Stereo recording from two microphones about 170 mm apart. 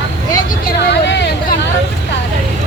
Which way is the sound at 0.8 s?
90° left.